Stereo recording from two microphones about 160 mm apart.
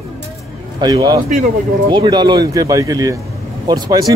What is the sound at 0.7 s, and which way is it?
Speech, 25° right (ahead or behind).